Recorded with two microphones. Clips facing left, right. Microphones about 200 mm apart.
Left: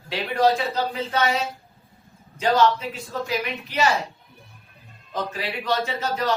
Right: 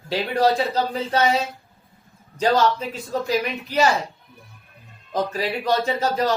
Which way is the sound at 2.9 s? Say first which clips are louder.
Right 4 dB; 40° right (ahead or behind).